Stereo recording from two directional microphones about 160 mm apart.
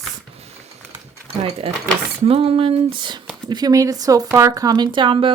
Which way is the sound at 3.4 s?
25° right (ahead or behind).